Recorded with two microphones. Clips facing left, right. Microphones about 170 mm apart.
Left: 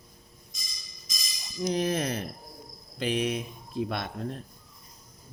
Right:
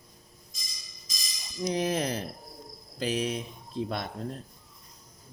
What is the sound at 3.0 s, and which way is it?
Cricket, 35° right (ahead or behind).